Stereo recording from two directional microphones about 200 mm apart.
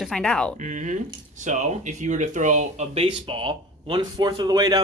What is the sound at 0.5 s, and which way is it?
Speech, 40° right (ahead or behind).